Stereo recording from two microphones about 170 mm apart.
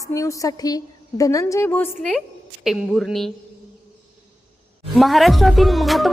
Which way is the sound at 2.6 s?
Centre (ahead or behind).